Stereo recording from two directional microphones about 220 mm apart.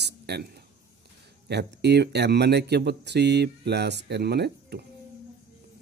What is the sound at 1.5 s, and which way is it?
Speech, 50° right (ahead or behind).